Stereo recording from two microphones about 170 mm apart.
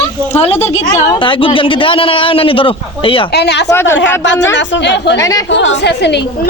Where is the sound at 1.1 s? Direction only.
30° left (ahead or behind).